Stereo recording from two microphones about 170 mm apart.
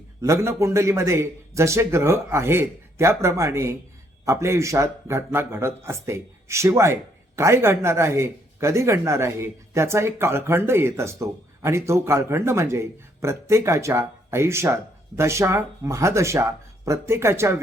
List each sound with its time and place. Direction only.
0.2 s a man's voice: 15° right (ahead or behind)